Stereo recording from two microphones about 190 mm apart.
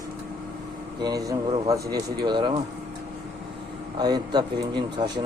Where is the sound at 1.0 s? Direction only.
20° right (ahead or behind).